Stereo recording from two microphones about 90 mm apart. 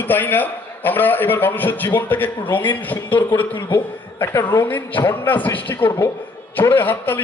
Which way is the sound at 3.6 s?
35° left (ahead or behind).